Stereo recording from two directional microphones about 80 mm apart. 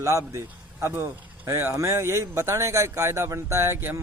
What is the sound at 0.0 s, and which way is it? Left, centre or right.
A man's voice, right.